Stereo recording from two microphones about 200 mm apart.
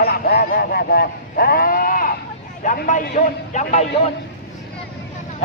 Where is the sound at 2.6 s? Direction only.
40° left (ahead or behind).